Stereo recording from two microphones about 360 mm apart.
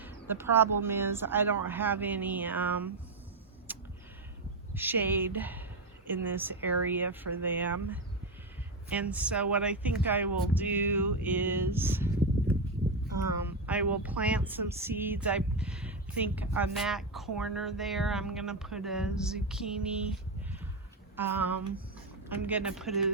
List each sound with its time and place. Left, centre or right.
0.0 s speech: centre
3.7 s a sound: centre
4.7 s speech: centre
21.2 s speech: centre